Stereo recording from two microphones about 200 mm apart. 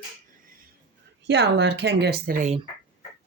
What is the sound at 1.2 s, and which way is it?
Speech, 60° right (ahead or behind).